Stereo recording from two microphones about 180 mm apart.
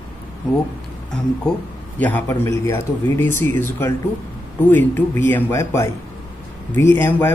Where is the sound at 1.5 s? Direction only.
5° left (ahead or behind).